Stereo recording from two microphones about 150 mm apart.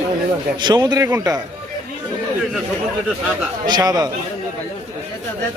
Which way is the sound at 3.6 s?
25° right (ahead or behind).